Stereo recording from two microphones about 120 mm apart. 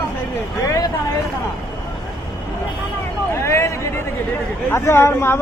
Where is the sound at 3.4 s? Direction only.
20° left (ahead or behind).